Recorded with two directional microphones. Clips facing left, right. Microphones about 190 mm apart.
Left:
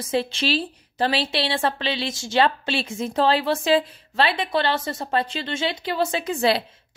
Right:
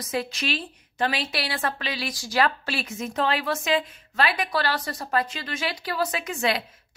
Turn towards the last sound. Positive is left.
turn(degrees=30)  # may be behind; listen again after turning